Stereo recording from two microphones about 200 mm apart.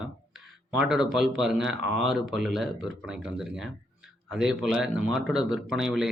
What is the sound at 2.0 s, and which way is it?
Speech, centre (ahead or behind).